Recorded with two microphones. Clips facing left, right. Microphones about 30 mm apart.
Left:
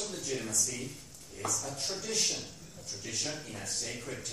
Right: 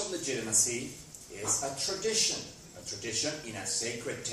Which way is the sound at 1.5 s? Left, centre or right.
Right.